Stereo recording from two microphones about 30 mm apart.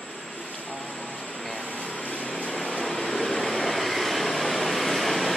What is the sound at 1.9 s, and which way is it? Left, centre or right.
Vehicle, left.